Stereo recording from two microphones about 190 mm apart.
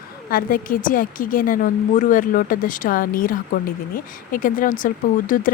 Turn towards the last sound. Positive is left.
turn(degrees=45)  # may be behind; listen again after turning